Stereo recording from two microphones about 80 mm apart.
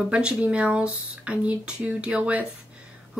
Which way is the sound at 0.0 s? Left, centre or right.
Centre.